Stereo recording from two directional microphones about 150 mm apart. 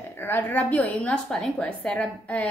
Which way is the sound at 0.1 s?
15° left (ahead or behind).